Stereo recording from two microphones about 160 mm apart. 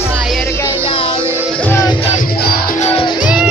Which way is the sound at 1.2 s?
15° right (ahead or behind).